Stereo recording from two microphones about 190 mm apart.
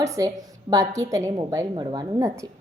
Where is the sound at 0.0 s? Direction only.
15° right (ahead or behind).